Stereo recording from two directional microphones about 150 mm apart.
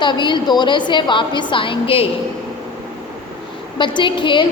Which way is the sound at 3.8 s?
30° left (ahead or behind).